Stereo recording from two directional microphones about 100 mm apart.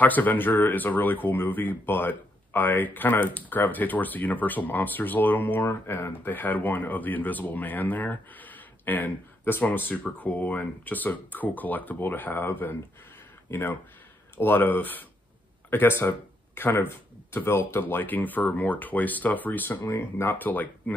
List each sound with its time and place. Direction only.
0.0 s speech: 15° left (ahead or behind)